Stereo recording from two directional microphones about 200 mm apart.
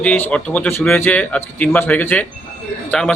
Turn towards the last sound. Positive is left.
turn(degrees=5)  # may be behind; listen again after turning